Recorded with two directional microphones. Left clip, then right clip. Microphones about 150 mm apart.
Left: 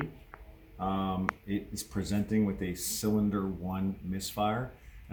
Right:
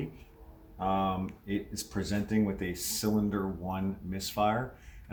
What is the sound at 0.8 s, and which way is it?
Speech, 10° right (ahead or behind).